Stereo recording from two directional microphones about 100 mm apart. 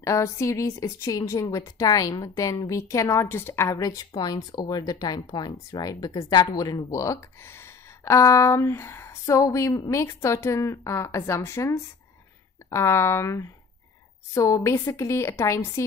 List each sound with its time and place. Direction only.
0.0 s a woman's voice: 30° left (ahead or behind)